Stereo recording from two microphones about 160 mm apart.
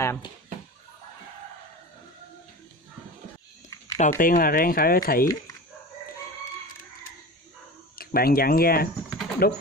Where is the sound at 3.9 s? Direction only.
55° left (ahead or behind).